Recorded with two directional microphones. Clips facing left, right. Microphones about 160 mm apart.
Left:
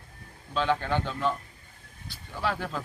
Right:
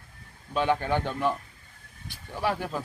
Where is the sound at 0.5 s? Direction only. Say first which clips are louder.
Right 2 dB; 15° right (ahead or behind).